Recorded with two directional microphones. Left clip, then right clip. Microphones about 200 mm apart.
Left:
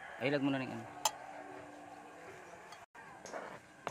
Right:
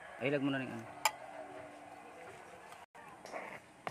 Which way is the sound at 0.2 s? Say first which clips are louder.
Even; 5° left (ahead or behind).